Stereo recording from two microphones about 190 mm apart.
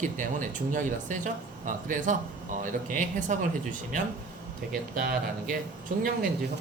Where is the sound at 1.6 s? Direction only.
45° right (ahead or behind).